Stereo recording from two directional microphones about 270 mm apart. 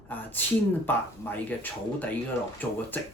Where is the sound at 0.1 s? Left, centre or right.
Centre.